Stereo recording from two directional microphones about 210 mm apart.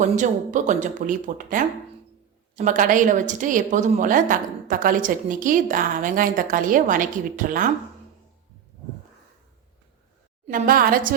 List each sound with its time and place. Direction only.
0.0 s a woman's voice: 35° right (ahead or behind)
10.4 s a woman's voice: 40° right (ahead or behind)